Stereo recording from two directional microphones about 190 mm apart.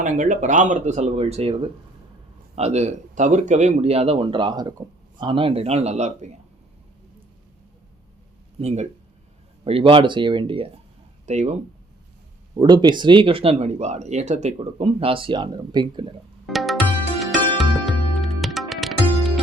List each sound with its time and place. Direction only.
0.0 s speech: 45° right (ahead or behind)
8.5 s speech: 35° right (ahead or behind)
12.5 s speech: 25° right (ahead or behind)
16.5 s music: centre (ahead or behind)